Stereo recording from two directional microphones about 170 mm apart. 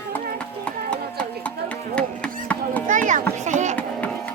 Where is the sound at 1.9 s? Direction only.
5° left (ahead or behind).